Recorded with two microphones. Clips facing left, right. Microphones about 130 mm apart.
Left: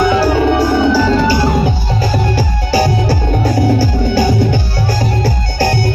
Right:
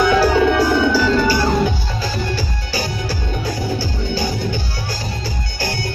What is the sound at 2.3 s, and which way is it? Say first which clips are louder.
Music: left 10 dB; 50° left (ahead or behind).